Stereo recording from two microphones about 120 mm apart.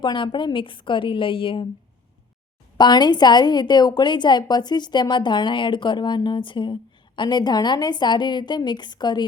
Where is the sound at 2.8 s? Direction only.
35° left (ahead or behind).